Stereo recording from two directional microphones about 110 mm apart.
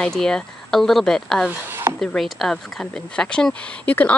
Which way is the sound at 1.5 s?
20° right (ahead or behind).